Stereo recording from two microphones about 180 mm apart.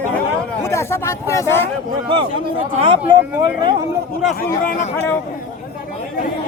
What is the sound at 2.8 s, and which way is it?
Speech, 30° right (ahead or behind).